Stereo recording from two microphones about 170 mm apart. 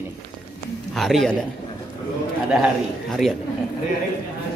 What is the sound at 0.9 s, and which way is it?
Speech, centre (ahead or behind).